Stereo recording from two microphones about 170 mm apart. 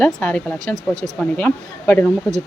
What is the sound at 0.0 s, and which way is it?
Speech, 10° left (ahead or behind).